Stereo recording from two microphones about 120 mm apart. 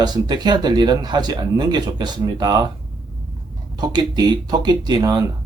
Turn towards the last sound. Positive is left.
turn(degrees=-40)  # may be behind; listen again after turning